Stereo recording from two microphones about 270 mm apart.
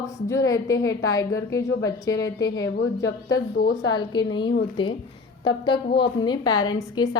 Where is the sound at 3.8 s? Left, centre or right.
Centre.